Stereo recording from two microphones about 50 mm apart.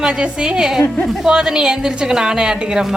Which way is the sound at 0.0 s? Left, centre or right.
Centre.